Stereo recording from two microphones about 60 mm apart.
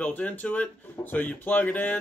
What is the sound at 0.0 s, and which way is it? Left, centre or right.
Speech, left.